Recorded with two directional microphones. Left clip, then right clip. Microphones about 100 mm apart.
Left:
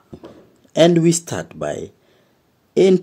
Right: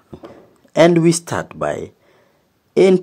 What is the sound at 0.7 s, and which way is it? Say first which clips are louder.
Speech: right 2 dB; 15° left (ahead or behind).